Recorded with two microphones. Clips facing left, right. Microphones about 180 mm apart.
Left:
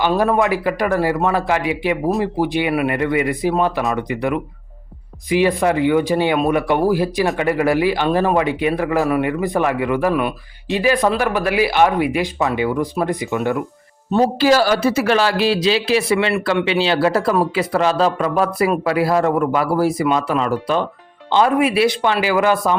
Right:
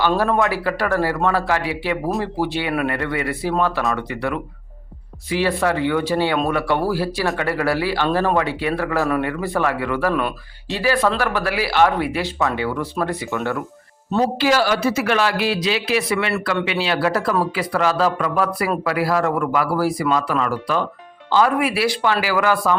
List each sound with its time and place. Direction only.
0.2 s speech: 20° left (ahead or behind)
14.3 s a man's voice: 35° left (ahead or behind); by 22.7 s 20° left (ahead or behind)